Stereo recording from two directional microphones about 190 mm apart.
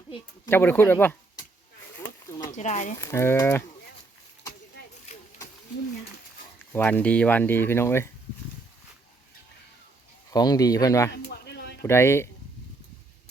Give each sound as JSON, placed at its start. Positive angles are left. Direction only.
{"t": 0.4, "sound": "speech", "side_deg": 10}
{"t": 2.5, "sound": "speech", "side_deg": 40}
{"t": 3.0, "sound": "speech", "side_deg": 15}
{"t": 6.6, "sound": "speech", "side_deg": 10}
{"t": 10.3, "sound": "speech", "side_deg": 20}
{"t": 11.1, "sound": "a sound", "side_deg": 60}
{"t": 11.8, "sound": "speech", "side_deg": 15}